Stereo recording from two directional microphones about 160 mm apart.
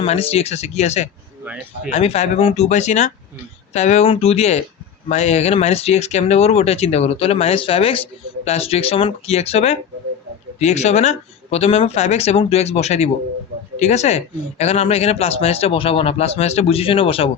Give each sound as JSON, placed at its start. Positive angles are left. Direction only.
{"t": 0.0, "sound": "speech", "side_deg": 40}
{"t": 1.5, "sound": "speech", "side_deg": -5}
{"t": 1.9, "sound": "speech", "side_deg": 40}